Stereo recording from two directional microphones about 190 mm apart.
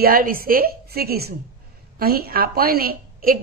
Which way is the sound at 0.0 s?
50° right (ahead or behind).